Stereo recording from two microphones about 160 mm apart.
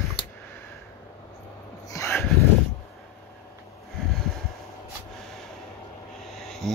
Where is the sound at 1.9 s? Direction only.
20° left (ahead or behind).